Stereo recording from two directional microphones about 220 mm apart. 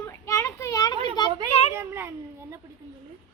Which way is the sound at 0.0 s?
15° left (ahead or behind).